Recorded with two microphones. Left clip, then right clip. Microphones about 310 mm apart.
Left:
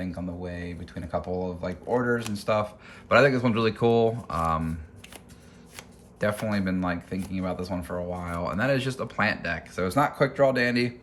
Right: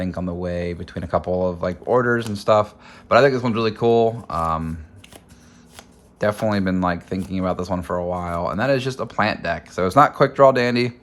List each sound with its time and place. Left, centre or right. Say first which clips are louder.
0.0 s speech: right 8 dB; centre
5.7 s speech: right 2 dB; centre